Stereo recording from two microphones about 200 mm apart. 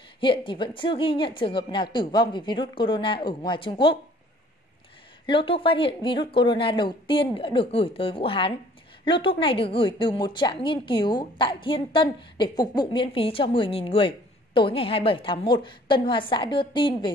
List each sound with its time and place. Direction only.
0.2 s a woman's voice: 25° left (ahead or behind)
5.2 s a woman's voice: 25° left (ahead or behind)